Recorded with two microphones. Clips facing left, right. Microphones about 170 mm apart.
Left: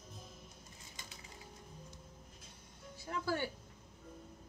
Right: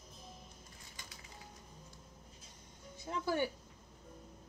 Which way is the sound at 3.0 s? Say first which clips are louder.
Right 2 dB; 20° right (ahead or behind).